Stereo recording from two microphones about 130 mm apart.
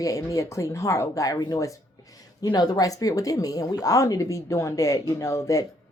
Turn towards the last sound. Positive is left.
turn(degrees=25)  # may be behind; listen again after turning